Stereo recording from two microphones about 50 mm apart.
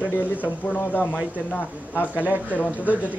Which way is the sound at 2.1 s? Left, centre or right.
Right.